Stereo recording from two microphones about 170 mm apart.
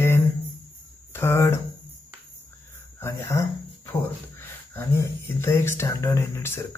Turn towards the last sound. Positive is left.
turn(degrees=15)  # may be behind; listen again after turning